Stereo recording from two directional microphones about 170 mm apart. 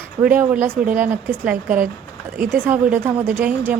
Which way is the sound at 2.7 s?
10° right (ahead or behind).